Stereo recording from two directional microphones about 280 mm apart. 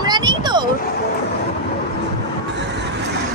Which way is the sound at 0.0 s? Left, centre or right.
Centre.